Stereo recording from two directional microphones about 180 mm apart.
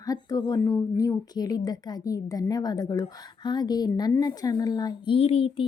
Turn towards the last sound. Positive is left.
turn(degrees=30)  # may be behind; listen again after turning